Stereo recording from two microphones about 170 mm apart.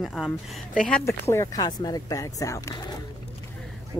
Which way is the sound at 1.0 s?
15° left (ahead or behind).